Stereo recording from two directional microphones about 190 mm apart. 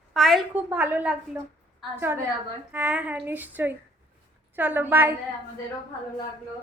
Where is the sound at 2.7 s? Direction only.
5° right (ahead or behind).